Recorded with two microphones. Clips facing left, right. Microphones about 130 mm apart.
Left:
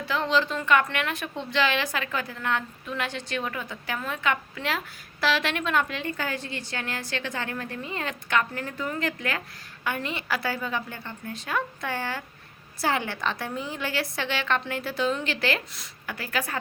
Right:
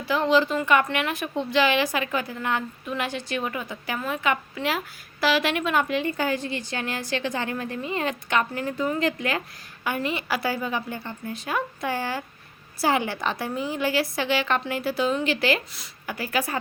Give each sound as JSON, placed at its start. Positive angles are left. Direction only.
{"t": 0.0, "sound": "a woman's voice", "side_deg": -10}
{"t": 9.8, "sound": "a woman's voice", "side_deg": -10}